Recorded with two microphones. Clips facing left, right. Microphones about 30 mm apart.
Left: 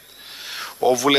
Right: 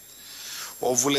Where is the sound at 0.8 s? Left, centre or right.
Left.